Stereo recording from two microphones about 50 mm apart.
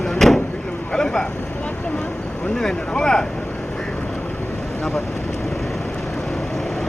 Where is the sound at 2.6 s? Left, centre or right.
Centre.